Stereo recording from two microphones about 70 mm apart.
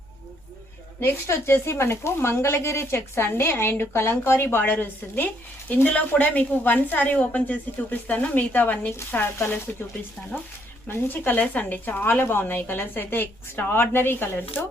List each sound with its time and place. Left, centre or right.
1.0 s speech: left